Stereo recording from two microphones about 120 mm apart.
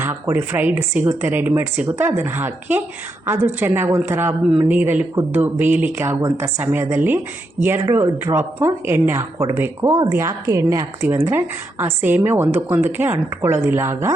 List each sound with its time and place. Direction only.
0.0 s speech: 20° right (ahead or behind)